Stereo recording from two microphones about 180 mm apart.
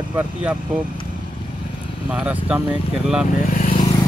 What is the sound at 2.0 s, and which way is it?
Speech, 10° right (ahead or behind).